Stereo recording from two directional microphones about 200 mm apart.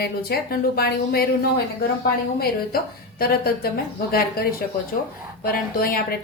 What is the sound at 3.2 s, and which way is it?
Speech, 50° left (ahead or behind).